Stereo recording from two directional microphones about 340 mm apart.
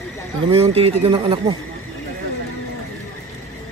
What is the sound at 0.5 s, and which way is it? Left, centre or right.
A man's voice, centre.